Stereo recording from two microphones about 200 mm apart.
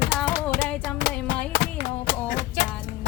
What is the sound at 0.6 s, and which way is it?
Music, 5° left (ahead or behind).